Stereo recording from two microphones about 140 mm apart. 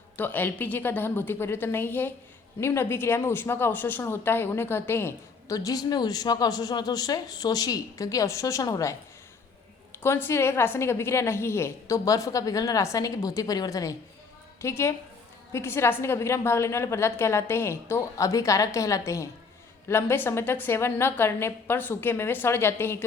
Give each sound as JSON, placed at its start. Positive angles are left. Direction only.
{"t": 0.2, "sound": "a woman's voice", "side_deg": 15}
{"t": 10.0, "sound": "a woman's voice", "side_deg": 15}